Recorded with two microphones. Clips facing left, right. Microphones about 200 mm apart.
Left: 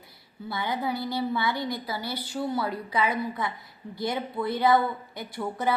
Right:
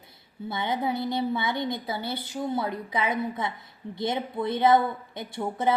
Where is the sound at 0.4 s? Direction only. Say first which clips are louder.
Right 2 dB; 20° right (ahead or behind).